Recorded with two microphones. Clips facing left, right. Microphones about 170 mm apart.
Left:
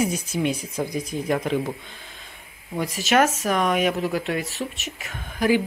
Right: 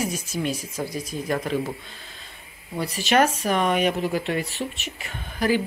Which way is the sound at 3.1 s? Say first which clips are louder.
Even; centre (ahead or behind).